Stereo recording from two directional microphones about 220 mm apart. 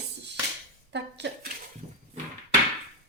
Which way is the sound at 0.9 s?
50° right (ahead or behind).